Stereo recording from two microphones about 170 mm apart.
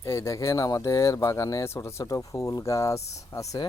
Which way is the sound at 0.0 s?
15° left (ahead or behind).